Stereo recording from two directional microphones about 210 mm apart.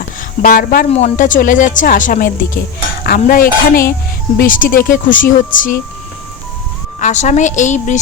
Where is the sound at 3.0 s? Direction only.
45° left (ahead or behind).